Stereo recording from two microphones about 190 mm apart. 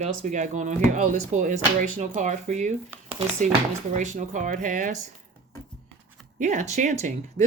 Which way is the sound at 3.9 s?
40° right (ahead or behind).